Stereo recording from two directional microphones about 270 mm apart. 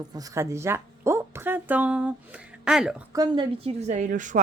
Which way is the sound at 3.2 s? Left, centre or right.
Centre.